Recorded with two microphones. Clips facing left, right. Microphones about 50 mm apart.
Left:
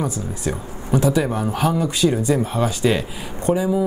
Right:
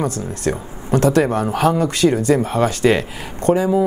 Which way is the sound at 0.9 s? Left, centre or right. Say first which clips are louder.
Right 3 dB; right.